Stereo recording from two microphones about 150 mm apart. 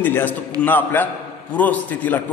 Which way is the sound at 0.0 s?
10° left (ahead or behind).